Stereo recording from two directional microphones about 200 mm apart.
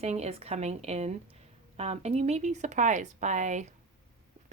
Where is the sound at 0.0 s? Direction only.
30° right (ahead or behind).